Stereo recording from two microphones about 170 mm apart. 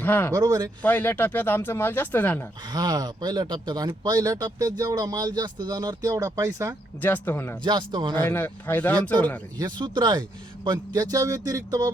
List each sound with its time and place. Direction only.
0.0 s speech: 10° left (ahead or behind)
0.3 s speech: 20° right (ahead or behind)
0.8 s speech: 10° left (ahead or behind)
2.7 s speech: 25° right (ahead or behind)
7.0 s speech: 10° left (ahead or behind)
7.6 s speech: 25° right (ahead or behind)
8.1 s speech: 10° left (ahead or behind)
9.6 s speech: 25° right (ahead or behind)